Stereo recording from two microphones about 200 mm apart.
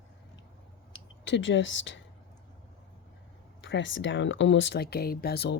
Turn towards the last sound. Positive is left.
turn(degrees=55)  # may be behind; listen again after turning